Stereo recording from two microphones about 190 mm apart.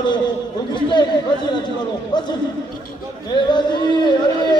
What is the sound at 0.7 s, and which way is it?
Speech, 25° left (ahead or behind).